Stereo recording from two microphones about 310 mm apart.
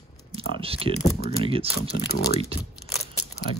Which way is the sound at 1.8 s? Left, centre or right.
Left.